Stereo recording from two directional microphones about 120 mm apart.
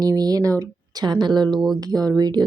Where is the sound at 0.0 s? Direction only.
30° right (ahead or behind).